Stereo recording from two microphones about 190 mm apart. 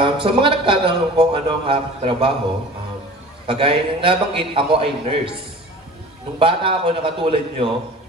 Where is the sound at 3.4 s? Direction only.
30° right (ahead or behind).